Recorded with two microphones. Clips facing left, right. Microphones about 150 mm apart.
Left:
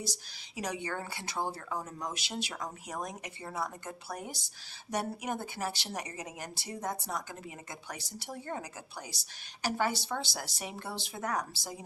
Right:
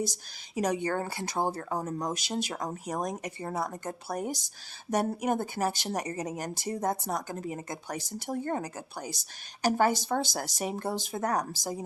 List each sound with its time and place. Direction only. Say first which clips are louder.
0.0 s speech: right 8 dB; 45° right (ahead or behind)